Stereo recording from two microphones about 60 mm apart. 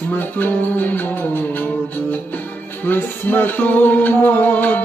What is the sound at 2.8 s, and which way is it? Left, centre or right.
Music, left.